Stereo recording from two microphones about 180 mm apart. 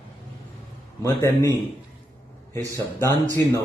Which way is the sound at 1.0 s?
20° left (ahead or behind).